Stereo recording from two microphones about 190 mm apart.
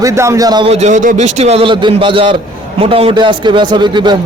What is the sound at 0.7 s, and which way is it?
A man's voice, 40° right (ahead or behind).